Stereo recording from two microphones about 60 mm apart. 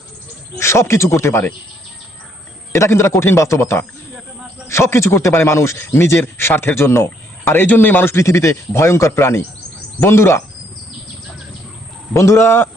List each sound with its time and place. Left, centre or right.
0.6 s speech: left
2.7 s speech: left
8.1 s speech: left
12.1 s speech: left